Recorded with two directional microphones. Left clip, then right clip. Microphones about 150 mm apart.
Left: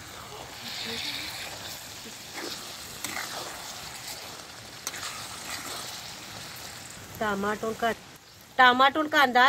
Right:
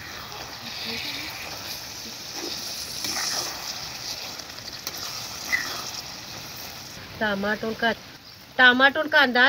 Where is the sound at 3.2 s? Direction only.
Centre (ahead or behind).